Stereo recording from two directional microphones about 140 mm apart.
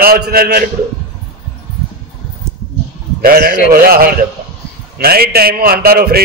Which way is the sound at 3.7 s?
90° right.